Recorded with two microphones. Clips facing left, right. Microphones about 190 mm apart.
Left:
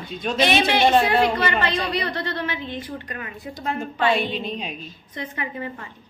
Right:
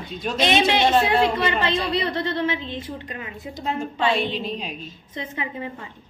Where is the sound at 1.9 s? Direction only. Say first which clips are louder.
Right 2 dB; 25° right (ahead or behind).